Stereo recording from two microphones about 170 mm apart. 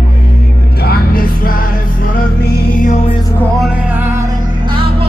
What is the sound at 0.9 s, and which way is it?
Music, 60° left (ahead or behind).